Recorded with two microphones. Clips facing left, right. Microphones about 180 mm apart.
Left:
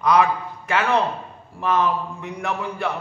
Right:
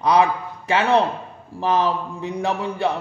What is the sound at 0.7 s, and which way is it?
A man's voice, 25° right (ahead or behind).